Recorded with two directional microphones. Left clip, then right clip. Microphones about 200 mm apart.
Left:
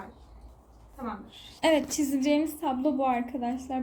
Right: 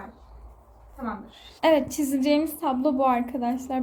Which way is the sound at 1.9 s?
20° right (ahead or behind).